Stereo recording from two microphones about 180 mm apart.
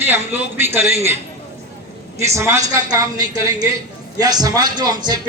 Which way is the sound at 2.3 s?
15° right (ahead or behind).